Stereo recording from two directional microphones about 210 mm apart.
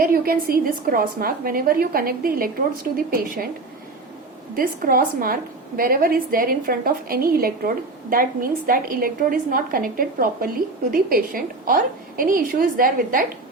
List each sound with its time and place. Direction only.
0.0 s a woman's voice: 45° right (ahead or behind)
4.5 s a woman's voice: 45° right (ahead or behind)